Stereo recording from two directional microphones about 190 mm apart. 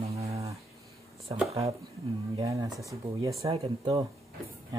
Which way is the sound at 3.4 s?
30° right (ahead or behind).